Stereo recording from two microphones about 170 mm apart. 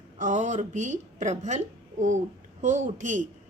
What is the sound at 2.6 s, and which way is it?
Speech, 45° right (ahead or behind).